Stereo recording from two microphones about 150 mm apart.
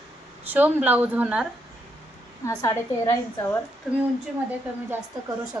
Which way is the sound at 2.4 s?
20° left (ahead or behind).